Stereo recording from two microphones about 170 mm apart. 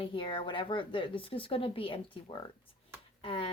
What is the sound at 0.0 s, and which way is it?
Speech, 30° left (ahead or behind).